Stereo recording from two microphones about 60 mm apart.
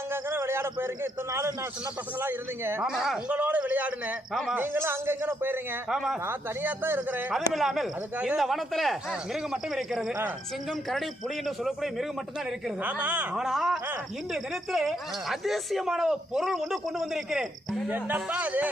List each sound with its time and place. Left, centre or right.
0.1 s speech: right
1.3 s a man's voice: right
2.2 s speech: right
2.8 s speech: centre
3.2 s a man's voice: right
5.9 s speech: centre
6.2 s speech: right
7.3 s a man's voice: centre
12.8 s a man's voice: right
13.3 s speech: centre
17.8 s a man's voice: right